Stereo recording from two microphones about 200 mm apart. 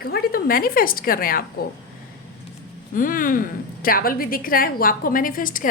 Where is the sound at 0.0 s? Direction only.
50° left (ahead or behind).